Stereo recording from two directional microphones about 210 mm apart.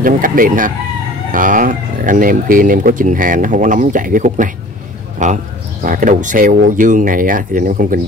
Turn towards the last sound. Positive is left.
turn(degrees=-40)  # may be behind; listen again after turning